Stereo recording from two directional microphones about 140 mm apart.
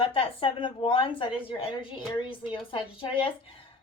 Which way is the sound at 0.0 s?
40° left (ahead or behind).